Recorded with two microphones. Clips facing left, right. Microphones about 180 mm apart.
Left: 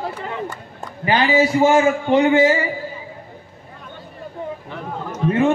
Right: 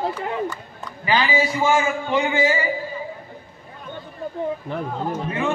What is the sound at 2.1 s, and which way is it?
Speech, 60° left (ahead or behind).